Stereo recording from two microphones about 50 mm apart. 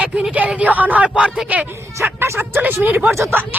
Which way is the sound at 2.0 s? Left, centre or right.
Right.